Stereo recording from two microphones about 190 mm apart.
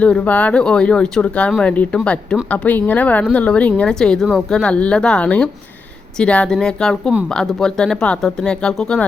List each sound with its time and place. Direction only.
0.0 s speech: 5° left (ahead or behind)